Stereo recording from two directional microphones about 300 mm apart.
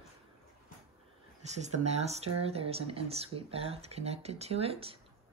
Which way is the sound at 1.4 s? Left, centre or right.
Right.